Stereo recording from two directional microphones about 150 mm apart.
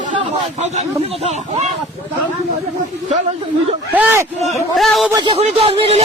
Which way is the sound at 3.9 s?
15° right (ahead or behind).